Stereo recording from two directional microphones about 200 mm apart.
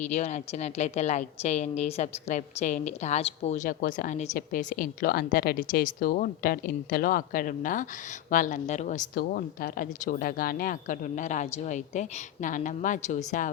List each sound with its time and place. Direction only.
0.1 s a woman's voice: 35° left (ahead or behind)
9.1 s a woman's voice: 45° left (ahead or behind)